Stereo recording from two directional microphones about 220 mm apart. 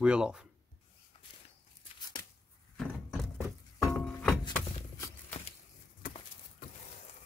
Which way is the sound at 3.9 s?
5° left (ahead or behind).